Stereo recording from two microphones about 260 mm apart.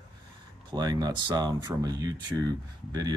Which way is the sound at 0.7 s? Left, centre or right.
Centre.